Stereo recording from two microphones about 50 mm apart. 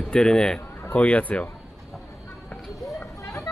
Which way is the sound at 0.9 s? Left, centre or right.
Left.